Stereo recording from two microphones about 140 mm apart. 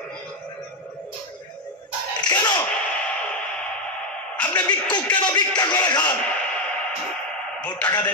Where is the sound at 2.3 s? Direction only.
30° left (ahead or behind).